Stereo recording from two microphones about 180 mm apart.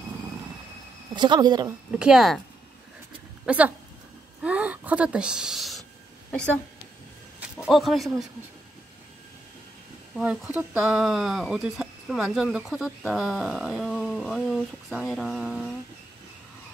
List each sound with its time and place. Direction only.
1.1 s speech: 25° right (ahead or behind)
2.0 s speech: 5° right (ahead or behind)
3.4 s speech: 10° right (ahead or behind)
7.5 s speech: centre (ahead or behind)
10.1 s speech: 5° right (ahead or behind)